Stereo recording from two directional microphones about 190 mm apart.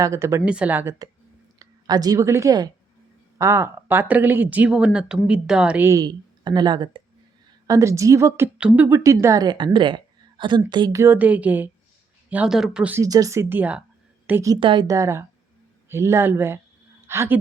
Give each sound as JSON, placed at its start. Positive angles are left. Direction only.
{"t": 0.0, "sound": "a woman's voice", "side_deg": -15}
{"t": 9.7, "sound": "a sound", "side_deg": -25}
{"t": 10.7, "sound": "speech", "side_deg": -20}